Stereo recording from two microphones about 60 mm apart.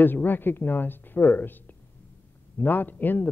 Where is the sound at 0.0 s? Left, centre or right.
Left.